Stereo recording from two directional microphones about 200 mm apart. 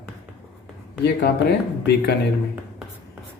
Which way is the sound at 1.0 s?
55° left (ahead or behind).